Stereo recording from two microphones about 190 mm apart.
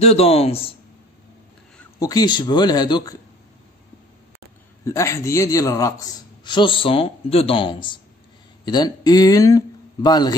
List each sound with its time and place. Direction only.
0.0 s speech: 30° left (ahead or behind)
2.0 s a man's voice: 20° left (ahead or behind)
4.8 s a man's voice: 15° left (ahead or behind)